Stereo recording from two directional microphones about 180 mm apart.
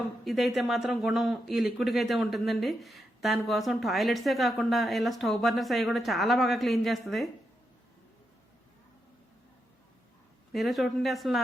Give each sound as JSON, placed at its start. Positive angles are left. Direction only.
{"t": 0.3, "sound": "speech", "side_deg": 0}
{"t": 10.5, "sound": "speech", "side_deg": 0}